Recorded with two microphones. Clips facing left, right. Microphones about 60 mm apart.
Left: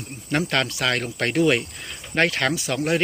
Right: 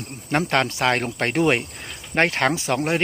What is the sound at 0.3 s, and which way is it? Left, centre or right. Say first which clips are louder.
Speech: right 2 dB; right.